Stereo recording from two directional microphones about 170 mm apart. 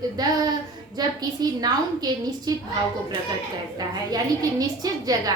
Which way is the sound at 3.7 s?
25° right (ahead or behind).